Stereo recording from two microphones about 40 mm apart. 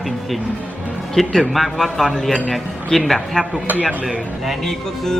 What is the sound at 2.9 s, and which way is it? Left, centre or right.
Speech, centre.